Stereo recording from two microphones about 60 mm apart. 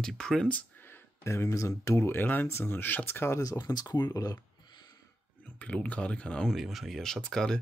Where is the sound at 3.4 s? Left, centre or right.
Left.